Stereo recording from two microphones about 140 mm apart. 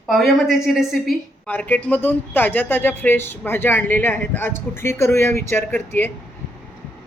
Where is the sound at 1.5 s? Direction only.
10° left (ahead or behind).